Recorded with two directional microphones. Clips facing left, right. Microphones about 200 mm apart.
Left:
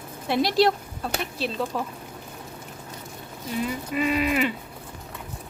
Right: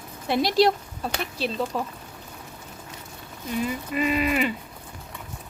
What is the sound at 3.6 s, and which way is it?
Speech, centre (ahead or behind).